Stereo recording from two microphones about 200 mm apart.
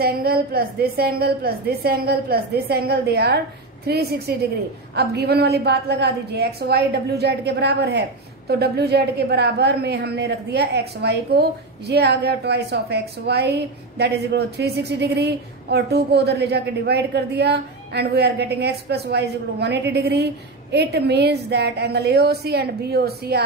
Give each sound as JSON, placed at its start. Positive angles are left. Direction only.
{"t": 0.0, "sound": "a woman's voice", "side_deg": -50}